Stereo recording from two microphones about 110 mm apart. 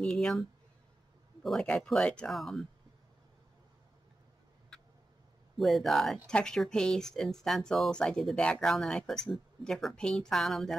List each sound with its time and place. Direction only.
0.0 s speech: 5° left (ahead or behind)
5.6 s speech: centre (ahead or behind)